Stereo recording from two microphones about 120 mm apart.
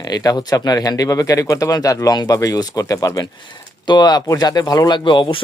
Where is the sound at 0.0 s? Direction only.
35° left (ahead or behind).